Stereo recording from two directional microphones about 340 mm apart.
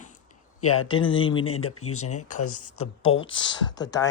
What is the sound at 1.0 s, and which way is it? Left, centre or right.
Speech, centre.